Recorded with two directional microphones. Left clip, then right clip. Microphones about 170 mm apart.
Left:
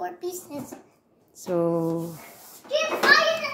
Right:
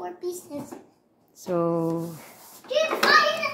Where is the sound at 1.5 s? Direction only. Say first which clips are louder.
Even; centre (ahead or behind).